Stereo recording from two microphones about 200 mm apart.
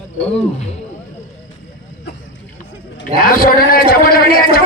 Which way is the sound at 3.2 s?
45° left (ahead or behind).